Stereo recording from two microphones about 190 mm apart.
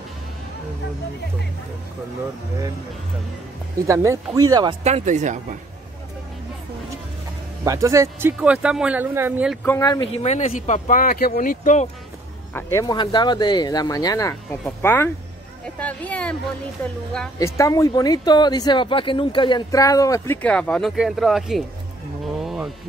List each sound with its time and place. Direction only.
3.8 s speech: 15° right (ahead or behind)
4.8 s speech: 35° right (ahead or behind)
7.6 s speech: 15° right (ahead or behind)
9.7 s speech: 20° left (ahead or behind)
10.1 s speech: 35° left (ahead or behind)
12.5 s speech: 15° left (ahead or behind)
22.4 s vehicle: centre (ahead or behind)